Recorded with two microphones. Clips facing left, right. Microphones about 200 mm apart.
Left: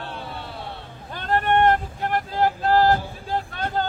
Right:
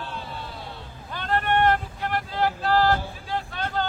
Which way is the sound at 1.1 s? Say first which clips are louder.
Left 3 dB; 45° left (ahead or behind).